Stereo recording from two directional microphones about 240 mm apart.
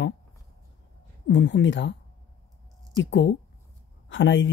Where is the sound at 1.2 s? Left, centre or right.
Left.